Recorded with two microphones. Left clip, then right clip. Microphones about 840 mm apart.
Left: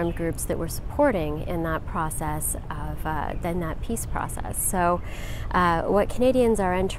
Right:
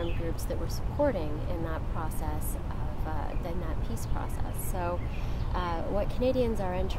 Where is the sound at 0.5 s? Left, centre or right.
Left.